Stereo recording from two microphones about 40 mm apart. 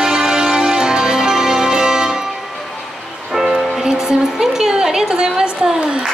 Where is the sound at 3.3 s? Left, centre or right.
Centre.